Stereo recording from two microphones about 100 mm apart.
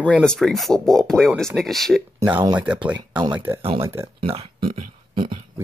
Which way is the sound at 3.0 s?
50° right (ahead or behind).